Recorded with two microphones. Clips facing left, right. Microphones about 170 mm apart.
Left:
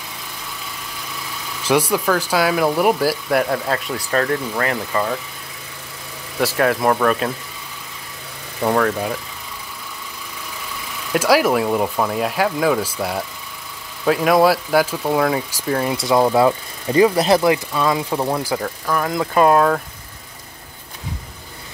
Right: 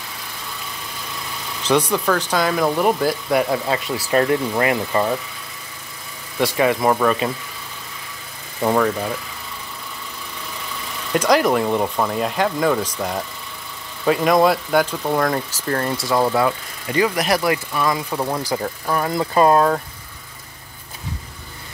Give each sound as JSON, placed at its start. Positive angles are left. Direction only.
{"t": 1.6, "sound": "speech", "side_deg": 10}
{"t": 4.1, "sound": "speech", "side_deg": -15}
{"t": 6.4, "sound": "speech", "side_deg": 0}
{"t": 8.6, "sound": "speech", "side_deg": 0}
{"t": 11.1, "sound": "speech", "side_deg": 5}
{"t": 16.0, "sound": "speech", "side_deg": 20}
{"t": 18.6, "sound": "speech", "side_deg": -10}